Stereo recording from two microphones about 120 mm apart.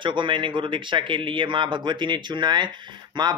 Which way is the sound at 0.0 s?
40° right (ahead or behind).